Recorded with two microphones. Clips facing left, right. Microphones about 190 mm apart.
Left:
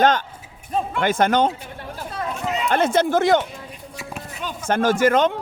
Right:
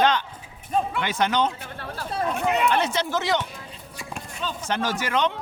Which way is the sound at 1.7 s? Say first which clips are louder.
Left 1 dB; 15° left (ahead or behind).